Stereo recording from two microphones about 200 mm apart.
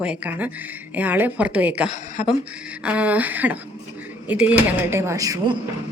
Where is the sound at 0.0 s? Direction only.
5° right (ahead or behind).